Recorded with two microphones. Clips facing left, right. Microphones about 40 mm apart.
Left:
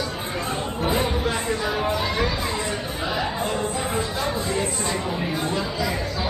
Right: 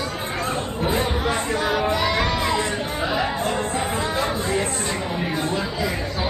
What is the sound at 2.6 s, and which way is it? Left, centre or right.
Chatter, centre.